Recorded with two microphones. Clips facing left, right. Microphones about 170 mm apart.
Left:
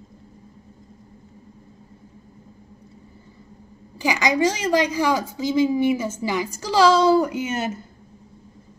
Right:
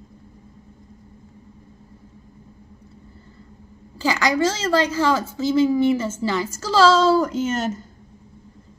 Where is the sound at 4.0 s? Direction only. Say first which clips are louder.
Even; 15° left (ahead or behind).